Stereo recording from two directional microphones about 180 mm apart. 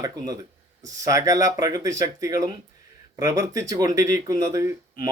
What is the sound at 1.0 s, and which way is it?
Speech, 20° right (ahead or behind).